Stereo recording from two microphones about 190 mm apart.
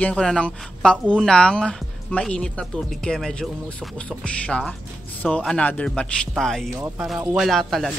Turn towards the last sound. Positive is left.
turn(degrees=0)  # may be behind; listen again after turning